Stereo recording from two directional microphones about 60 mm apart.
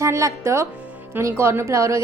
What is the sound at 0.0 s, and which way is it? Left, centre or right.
A woman's voice, right.